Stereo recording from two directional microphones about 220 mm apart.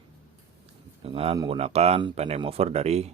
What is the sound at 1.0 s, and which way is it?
Speech, 25° right (ahead or behind).